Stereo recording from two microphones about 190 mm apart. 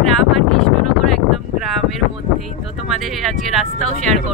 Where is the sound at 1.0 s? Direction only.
Centre (ahead or behind).